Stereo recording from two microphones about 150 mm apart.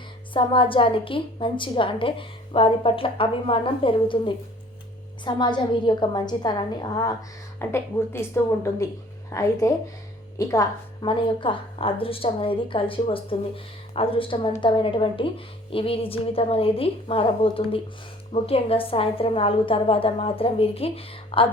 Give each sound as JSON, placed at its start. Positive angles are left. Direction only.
{"t": 0.3, "sound": "a woman's voice", "side_deg": 35}